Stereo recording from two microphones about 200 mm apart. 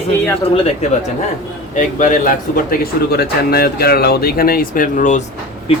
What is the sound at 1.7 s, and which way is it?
Speech, 40° left (ahead or behind).